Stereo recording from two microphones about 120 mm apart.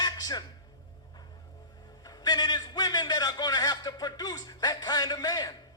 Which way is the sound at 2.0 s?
35° left (ahead or behind).